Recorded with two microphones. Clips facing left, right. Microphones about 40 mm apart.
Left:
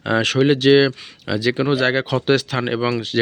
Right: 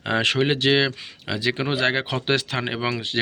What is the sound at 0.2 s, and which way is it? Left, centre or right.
Speech, right.